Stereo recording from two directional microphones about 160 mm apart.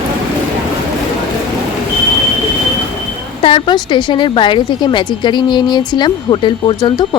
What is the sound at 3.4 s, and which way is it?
A woman's voice, 30° left (ahead or behind).